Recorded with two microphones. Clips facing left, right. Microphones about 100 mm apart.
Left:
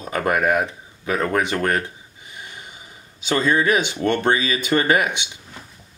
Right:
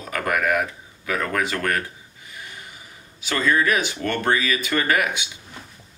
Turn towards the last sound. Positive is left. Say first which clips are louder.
# left 3 dB
turn(degrees=20)  # may be behind; listen again after turning